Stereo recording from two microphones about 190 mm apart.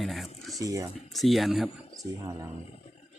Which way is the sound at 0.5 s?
20° right (ahead or behind).